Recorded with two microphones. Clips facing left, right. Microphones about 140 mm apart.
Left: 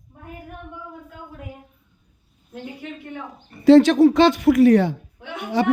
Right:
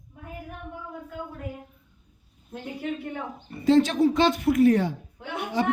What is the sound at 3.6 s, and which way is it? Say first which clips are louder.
A woman's voice: left 8 dB; 75° left (ahead or behind).